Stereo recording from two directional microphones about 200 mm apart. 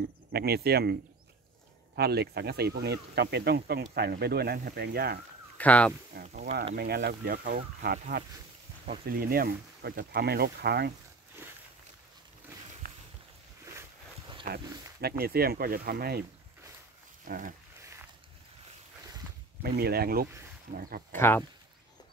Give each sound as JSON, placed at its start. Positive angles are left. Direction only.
{"t": 0.3, "sound": "speech", "side_deg": -55}
{"t": 2.0, "sound": "speech", "side_deg": -55}
{"t": 5.6, "sound": "speech", "side_deg": 5}
{"t": 6.7, "sound": "speech", "side_deg": -55}
{"t": 9.1, "sound": "speech", "side_deg": -45}
{"t": 14.5, "sound": "speech", "side_deg": -45}
{"t": 17.2, "sound": "a sound", "side_deg": -45}
{"t": 19.6, "sound": "speech", "side_deg": -50}
{"t": 21.1, "sound": "speech", "side_deg": 10}